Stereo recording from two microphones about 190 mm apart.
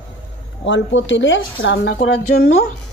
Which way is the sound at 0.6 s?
75° left (ahead or behind).